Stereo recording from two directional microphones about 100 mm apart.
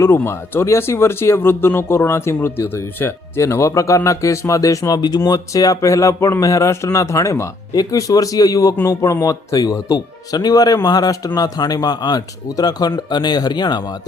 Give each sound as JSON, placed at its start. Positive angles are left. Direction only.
{"t": 0.0, "sound": "speech", "side_deg": 25}